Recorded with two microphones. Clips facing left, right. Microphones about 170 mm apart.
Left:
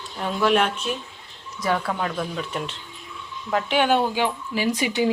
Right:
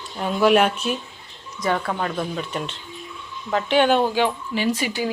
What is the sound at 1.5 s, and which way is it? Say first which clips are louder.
Speech: right 1 dB; 5° left (ahead or behind).